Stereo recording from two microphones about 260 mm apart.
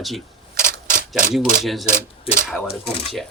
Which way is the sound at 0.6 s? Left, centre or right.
Right.